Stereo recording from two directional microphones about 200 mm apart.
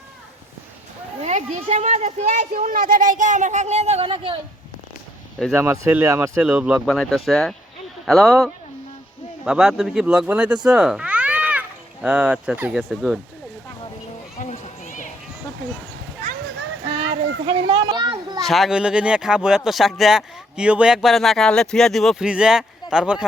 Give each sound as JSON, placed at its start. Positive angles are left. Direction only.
{"t": 1.2, "sound": "speech", "side_deg": -35}
{"t": 5.5, "sound": "speech", "side_deg": -15}
{"t": 14.3, "sound": "run", "side_deg": 35}
{"t": 17.0, "sound": "a sound", "side_deg": -70}
{"t": 17.7, "sound": "children playing", "side_deg": -25}
{"t": 18.4, "sound": "speech", "side_deg": 0}